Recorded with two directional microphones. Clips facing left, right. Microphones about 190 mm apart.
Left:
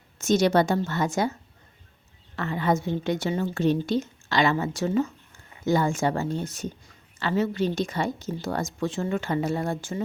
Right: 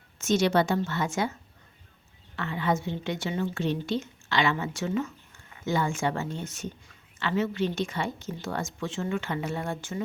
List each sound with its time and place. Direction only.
0.2 s a woman's voice: 40° left (ahead or behind)